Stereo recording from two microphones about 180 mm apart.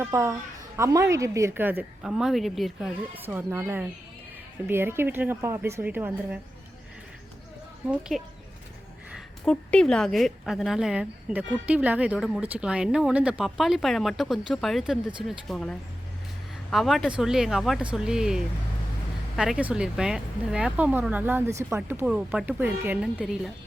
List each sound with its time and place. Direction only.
0.0 s speech: 15° right (ahead or behind); by 2.9 s centre (ahead or behind)
3.2 s speech: 10° right (ahead or behind)
7.9 s speech: 5° right (ahead or behind)
9.4 s speech: 5° left (ahead or behind)